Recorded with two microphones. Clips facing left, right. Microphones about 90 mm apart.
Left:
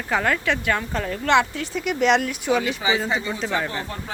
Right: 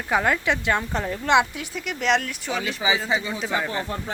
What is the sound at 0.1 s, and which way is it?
Speech, 15° right (ahead or behind).